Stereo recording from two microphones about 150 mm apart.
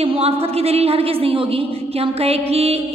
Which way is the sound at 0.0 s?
40° right (ahead or behind).